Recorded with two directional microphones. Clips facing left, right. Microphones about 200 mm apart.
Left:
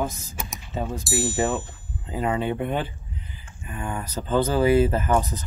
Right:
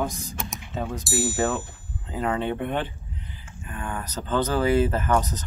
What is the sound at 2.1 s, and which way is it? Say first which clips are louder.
Speech: left 1 dB; 10° left (ahead or behind).